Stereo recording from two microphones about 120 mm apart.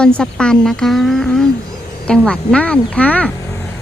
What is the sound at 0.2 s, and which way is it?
Speech, 5° left (ahead or behind).